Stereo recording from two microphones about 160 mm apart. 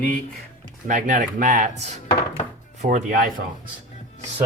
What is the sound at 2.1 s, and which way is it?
Chopping, 35° left (ahead or behind).